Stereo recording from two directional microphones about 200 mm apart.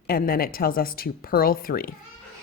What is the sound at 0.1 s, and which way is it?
A woman's voice, 45° left (ahead or behind).